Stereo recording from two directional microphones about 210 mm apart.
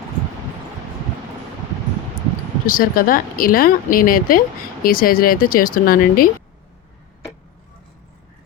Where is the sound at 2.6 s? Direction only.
40° left (ahead or behind).